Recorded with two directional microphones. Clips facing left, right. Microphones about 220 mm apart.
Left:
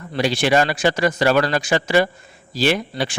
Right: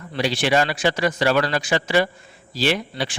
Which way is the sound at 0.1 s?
45° left (ahead or behind).